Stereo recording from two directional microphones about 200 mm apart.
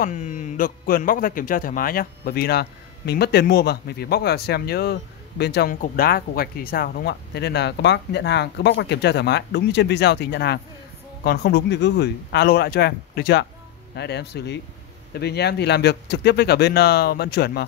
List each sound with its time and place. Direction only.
0.0 s a man's voice: 40° left (ahead or behind)